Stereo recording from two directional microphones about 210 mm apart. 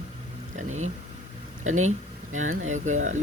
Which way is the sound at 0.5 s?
35° right (ahead or behind).